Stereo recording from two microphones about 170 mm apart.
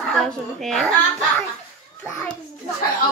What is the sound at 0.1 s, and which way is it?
Speech, centre (ahead or behind).